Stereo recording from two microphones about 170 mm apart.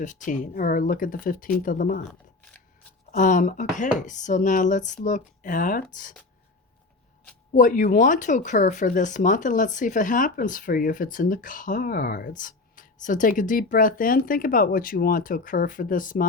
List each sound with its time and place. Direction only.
0.3 s speech: 55° left (ahead or behind)
3.1 s speech: 50° left (ahead or behind)
7.5 s speech: 50° left (ahead or behind)